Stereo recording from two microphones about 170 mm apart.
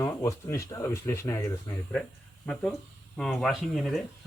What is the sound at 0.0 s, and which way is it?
Speech, 15° left (ahead or behind).